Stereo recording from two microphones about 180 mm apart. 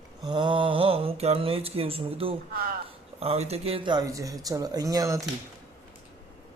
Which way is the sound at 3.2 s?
35° right (ahead or behind).